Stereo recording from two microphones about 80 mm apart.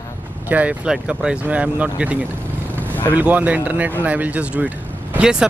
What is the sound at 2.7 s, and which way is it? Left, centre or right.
Vehicle, left.